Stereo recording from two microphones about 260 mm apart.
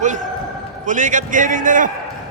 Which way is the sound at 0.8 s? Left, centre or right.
Right.